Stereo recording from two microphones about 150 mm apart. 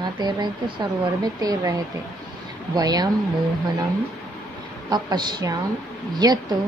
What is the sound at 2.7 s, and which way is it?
Speech, 25° right (ahead or behind).